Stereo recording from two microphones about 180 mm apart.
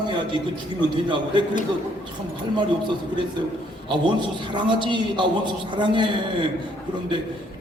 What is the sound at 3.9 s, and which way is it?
A man's voice, 25° right (ahead or behind).